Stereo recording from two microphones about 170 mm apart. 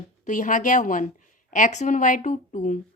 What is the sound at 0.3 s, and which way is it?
A woman's voice, 50° left (ahead or behind).